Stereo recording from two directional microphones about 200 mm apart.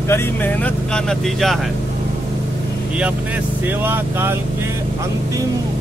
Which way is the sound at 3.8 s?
10° right (ahead or behind).